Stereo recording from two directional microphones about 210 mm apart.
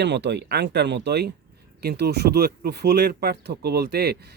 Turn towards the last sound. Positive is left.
turn(degrees=-50)  # may be behind; listen again after turning